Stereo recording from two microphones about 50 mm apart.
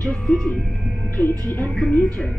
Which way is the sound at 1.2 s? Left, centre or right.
Left.